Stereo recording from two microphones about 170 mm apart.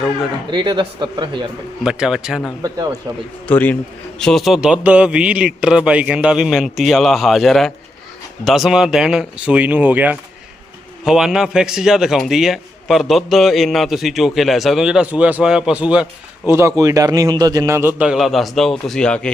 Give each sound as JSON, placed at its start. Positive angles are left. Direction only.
{"t": 0.5, "sound": "a man's voice", "side_deg": -25}
{"t": 1.8, "sound": "a man's voice", "side_deg": -5}
{"t": 3.4, "sound": "a man's voice", "side_deg": 10}
{"t": 16.6, "sound": "a man's voice", "side_deg": -20}